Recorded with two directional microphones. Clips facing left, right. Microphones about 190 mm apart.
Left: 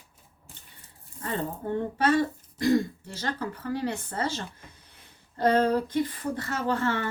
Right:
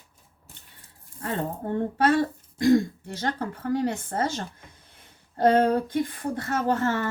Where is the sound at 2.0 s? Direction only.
50° right (ahead or behind).